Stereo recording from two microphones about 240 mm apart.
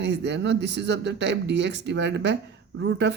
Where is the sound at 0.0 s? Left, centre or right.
Right.